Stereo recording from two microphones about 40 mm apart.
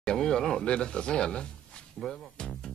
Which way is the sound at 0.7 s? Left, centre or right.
Left.